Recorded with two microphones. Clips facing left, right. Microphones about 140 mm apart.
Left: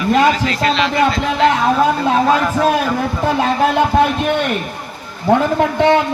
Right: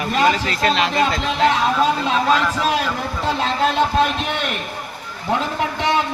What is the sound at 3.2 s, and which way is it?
Speech, 60° left (ahead or behind).